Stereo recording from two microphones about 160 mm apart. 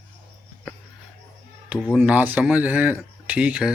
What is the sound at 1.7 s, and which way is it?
Speech, 5° right (ahead or behind).